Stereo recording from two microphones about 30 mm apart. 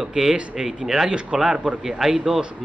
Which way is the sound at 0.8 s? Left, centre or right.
Centre.